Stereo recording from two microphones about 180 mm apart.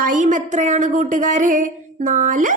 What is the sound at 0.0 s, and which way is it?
A woman's voice, 45° right (ahead or behind).